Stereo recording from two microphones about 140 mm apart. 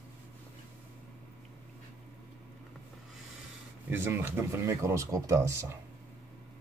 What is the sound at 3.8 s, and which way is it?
Speech, 15° right (ahead or behind).